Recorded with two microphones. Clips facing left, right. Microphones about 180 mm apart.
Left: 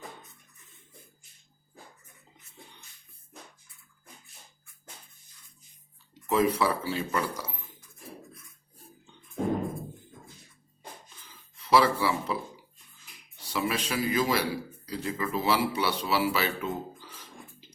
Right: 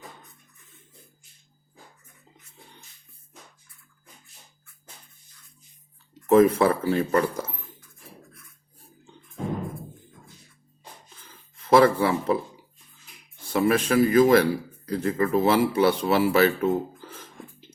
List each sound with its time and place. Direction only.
6.2 s speech: 50° right (ahead or behind)
11.3 s a sound: 50° right (ahead or behind)
13.5 s speech: 50° right (ahead or behind)